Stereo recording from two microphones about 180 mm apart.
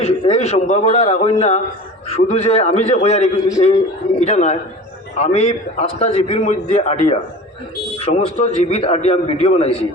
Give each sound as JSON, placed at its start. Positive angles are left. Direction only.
{"t": 0.0, "sound": "a man's voice", "side_deg": 35}